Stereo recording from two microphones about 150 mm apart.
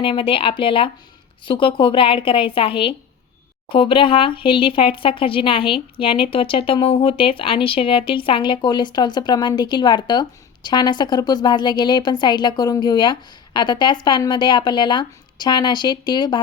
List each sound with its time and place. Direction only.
0.0 s speech: 35° left (ahead or behind)